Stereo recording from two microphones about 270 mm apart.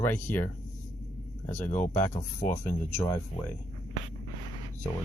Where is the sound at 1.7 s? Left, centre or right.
Left.